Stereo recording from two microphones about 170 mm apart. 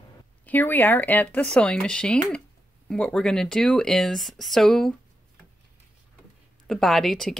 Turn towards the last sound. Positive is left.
turn(degrees=0)  # may be behind; listen again after turning